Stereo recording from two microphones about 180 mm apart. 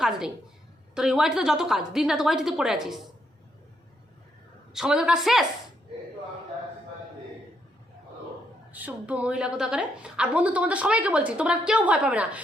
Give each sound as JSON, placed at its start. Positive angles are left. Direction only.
{"t": 0.0, "sound": "a woman's voice", "side_deg": -5}
{"t": 4.7, "sound": "a woman's voice", "side_deg": -5}
{"t": 8.7, "sound": "a woman's voice", "side_deg": -10}